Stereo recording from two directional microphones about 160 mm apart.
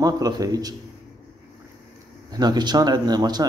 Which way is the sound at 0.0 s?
25° right (ahead or behind).